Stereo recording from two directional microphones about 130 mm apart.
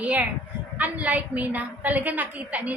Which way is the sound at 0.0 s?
10° right (ahead or behind).